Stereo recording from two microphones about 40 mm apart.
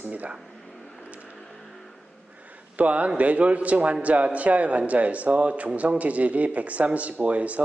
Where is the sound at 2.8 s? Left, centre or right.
Right.